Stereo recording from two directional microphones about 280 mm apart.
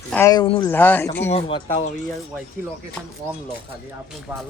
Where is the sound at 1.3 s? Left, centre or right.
Centre.